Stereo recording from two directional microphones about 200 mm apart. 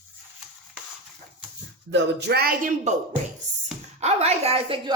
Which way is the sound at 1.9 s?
55° right (ahead or behind).